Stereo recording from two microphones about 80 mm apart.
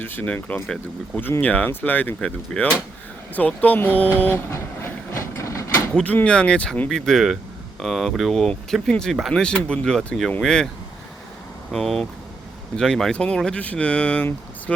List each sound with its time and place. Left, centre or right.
0.0 s speech: left
2.2 s speech: centre
4.2 s vehicle: left
5.9 s speech: centre
11.7 s speech: centre